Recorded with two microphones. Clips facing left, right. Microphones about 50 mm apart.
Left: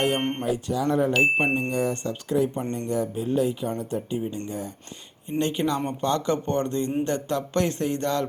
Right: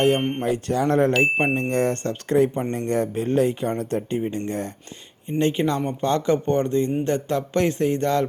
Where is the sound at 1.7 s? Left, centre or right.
Right.